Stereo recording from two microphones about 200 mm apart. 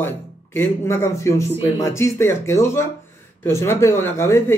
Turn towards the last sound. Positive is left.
turn(degrees=15)  # may be behind; listen again after turning